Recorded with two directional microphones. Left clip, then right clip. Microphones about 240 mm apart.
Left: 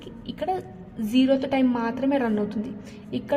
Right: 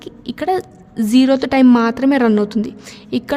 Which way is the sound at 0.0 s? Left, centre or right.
Right.